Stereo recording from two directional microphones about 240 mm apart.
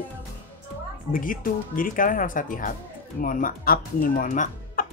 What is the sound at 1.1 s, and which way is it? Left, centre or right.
Speech, left.